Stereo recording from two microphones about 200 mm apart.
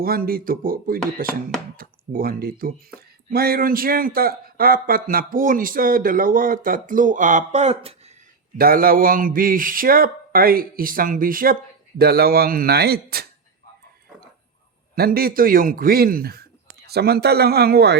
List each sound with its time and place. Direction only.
0.0 s a man's voice: 50° right (ahead or behind); by 8.1 s 30° right (ahead or behind)
8.5 s a man's voice: 45° right (ahead or behind)
14.9 s a man's voice: 50° right (ahead or behind)